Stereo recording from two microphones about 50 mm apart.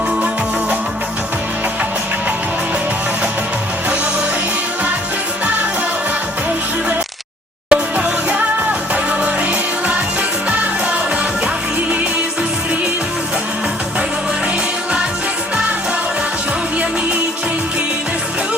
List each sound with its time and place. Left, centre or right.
7.7 s music: right